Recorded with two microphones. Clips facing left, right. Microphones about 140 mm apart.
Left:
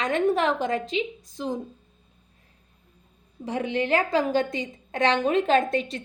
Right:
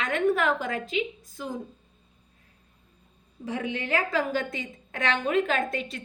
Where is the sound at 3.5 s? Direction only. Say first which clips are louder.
Left 5 dB; 30° left (ahead or behind).